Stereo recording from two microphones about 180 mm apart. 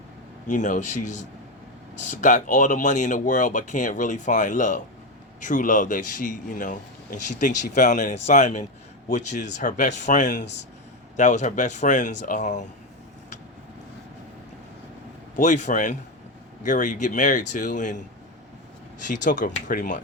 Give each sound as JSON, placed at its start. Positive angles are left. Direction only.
{"t": 0.5, "sound": "speech", "side_deg": 45}
{"t": 15.4, "sound": "speech", "side_deg": 40}
{"t": 19.0, "sound": "speech", "side_deg": 45}